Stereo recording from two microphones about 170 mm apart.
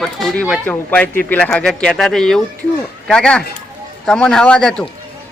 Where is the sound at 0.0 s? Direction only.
Centre (ahead or behind).